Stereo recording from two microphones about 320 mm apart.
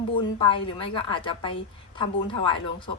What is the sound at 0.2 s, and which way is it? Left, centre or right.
A woman's voice, centre.